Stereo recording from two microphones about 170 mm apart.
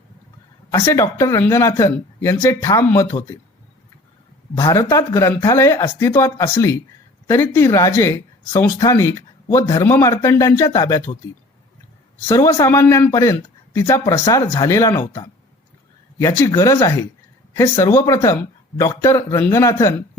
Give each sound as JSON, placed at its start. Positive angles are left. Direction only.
{"t": 0.7, "sound": "speech", "side_deg": 20}
{"t": 4.5, "sound": "speech", "side_deg": 25}
{"t": 12.3, "sound": "speech", "side_deg": 20}